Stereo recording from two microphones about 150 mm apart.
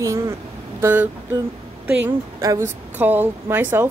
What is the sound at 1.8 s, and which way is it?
A woman's voice, 20° right (ahead or behind).